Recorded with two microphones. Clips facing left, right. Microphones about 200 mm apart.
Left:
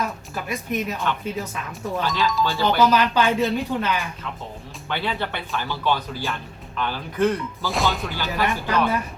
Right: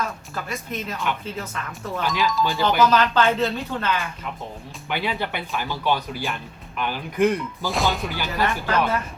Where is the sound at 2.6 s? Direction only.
15° left (ahead or behind).